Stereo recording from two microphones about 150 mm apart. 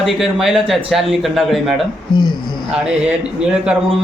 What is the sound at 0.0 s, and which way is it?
A man's voice, centre (ahead or behind).